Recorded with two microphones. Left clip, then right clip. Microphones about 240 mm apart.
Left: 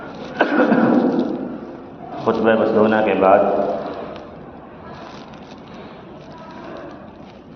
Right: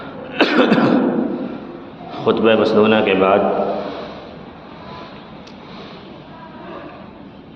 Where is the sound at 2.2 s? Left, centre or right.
Right.